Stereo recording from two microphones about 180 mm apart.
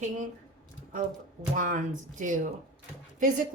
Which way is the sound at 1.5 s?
45° right (ahead or behind).